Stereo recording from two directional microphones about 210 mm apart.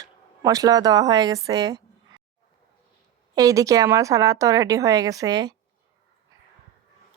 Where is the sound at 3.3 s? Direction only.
15° right (ahead or behind).